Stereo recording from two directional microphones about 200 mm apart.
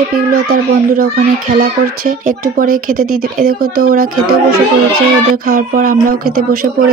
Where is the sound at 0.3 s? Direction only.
45° right (ahead or behind).